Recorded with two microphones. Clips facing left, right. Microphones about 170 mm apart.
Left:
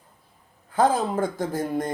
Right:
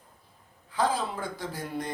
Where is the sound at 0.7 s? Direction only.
50° left (ahead or behind).